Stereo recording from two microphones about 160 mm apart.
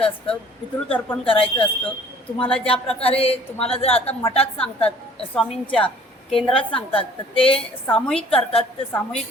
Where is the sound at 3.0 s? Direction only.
35° left (ahead or behind).